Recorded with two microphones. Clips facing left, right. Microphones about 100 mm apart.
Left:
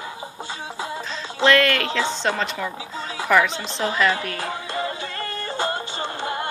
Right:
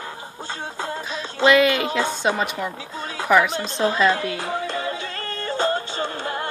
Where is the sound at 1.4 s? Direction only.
10° right (ahead or behind).